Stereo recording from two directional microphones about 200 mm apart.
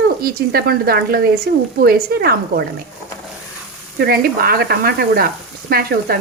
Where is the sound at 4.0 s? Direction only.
50° right (ahead or behind).